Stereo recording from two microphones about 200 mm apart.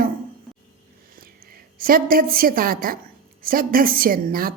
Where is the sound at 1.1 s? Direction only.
50° right (ahead or behind).